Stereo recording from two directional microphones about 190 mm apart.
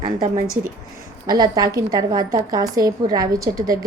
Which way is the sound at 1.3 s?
20° right (ahead or behind).